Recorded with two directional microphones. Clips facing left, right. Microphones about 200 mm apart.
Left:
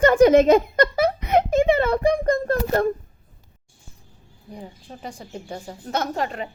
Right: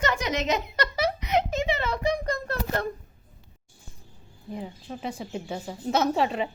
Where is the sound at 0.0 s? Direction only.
50° left (ahead or behind).